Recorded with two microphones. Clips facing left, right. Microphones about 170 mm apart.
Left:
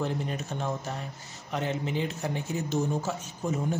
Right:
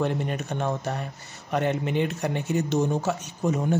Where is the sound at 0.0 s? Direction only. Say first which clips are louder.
Right 4 dB; 65° right (ahead or behind).